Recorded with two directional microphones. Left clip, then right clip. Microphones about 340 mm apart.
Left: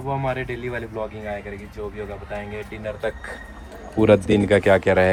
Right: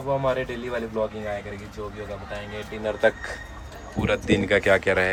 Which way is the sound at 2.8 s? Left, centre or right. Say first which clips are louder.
Right 6 dB; centre.